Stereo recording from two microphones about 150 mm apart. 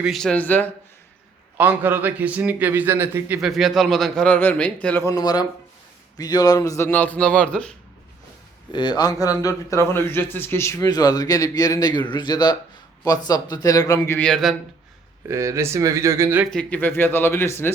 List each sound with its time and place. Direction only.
0.0 s a man's voice: centre (ahead or behind)
1.5 s a man's voice: 10° right (ahead or behind)
3.4 s a man's voice: centre (ahead or behind)
5.0 s a man's voice: 25° left (ahead or behind); by 7.7 s 5° left (ahead or behind)
8.7 s a man's voice: 30° left (ahead or behind); by 14.5 s 5° left (ahead or behind)
15.3 s speech: 20° right (ahead or behind)
16.5 s a man's voice: 10° left (ahead or behind)